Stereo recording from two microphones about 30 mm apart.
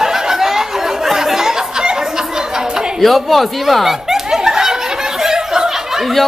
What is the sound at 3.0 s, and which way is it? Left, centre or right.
Speech, centre.